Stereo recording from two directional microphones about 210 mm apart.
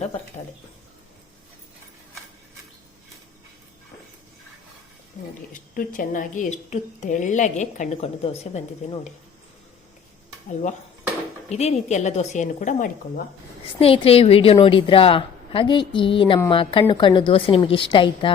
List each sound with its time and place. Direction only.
5.7 s a woman's voice: 40° left (ahead or behind)
11.4 s a woman's voice: 30° left (ahead or behind)
13.7 s a woman's voice: 25° left (ahead or behind)